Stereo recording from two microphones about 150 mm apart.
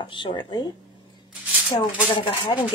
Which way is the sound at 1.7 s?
30° left (ahead or behind).